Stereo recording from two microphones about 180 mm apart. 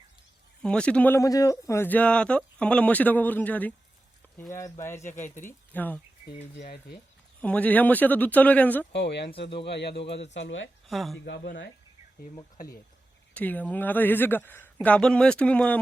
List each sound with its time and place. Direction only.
0.6 s speech: 5° left (ahead or behind)
7.4 s speech: 10° left (ahead or behind)
8.9 s speech: 70° left (ahead or behind)
10.3 s speech: 90° left
10.8 s speech: centre (ahead or behind)
11.3 s speech: 70° left (ahead or behind)
13.3 s speech: 10° left (ahead or behind)